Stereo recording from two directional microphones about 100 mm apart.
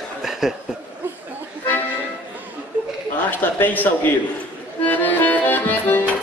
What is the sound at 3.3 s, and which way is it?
Speech, 20° left (ahead or behind).